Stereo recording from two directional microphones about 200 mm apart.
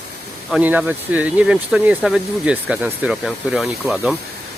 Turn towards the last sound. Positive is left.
turn(degrees=-10)  # may be behind; listen again after turning